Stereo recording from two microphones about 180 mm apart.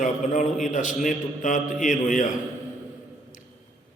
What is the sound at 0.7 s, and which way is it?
A man's voice, 45° left (ahead or behind).